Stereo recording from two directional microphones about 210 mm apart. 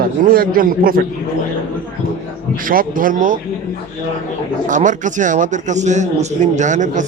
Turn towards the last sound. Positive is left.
turn(degrees=-35)  # may be behind; listen again after turning